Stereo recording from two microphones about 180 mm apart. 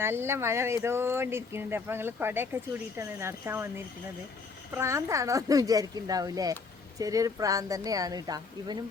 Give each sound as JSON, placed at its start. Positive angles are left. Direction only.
{"t": 0.0, "sound": "speech", "side_deg": -15}
{"t": 4.8, "sound": "speech", "side_deg": -15}